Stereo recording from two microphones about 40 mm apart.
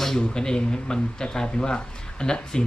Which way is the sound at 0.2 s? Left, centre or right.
Centre.